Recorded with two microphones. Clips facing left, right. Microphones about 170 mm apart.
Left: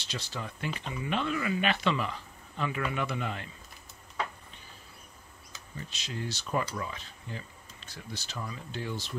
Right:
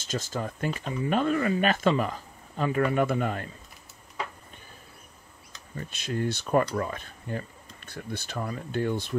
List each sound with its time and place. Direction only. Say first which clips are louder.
0.0 s speech: right 7 dB; 45° right (ahead or behind)
5.8 s speech: right 8 dB; 55° right (ahead or behind)